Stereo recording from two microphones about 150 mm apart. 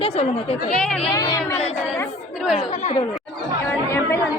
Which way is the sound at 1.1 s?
20° left (ahead or behind).